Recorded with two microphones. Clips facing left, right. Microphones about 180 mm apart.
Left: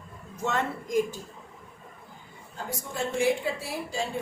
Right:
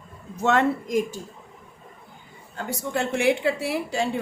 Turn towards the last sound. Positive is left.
turn(degrees=-70)  # may be behind; listen again after turning